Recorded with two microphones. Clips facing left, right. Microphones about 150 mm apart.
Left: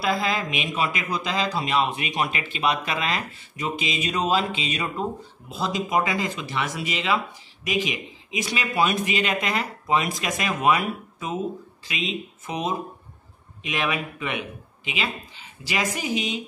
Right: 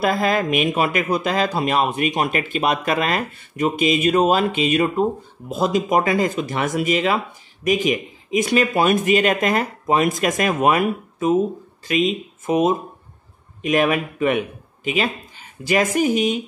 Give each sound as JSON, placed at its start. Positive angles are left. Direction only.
{"t": 0.0, "sound": "speech", "side_deg": -50}